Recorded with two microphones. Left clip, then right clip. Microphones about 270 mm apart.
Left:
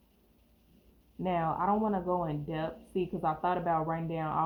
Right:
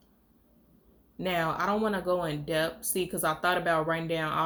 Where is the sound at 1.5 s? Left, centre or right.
Right.